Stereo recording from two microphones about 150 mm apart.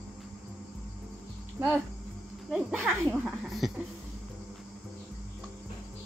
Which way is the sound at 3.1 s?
Centre (ahead or behind).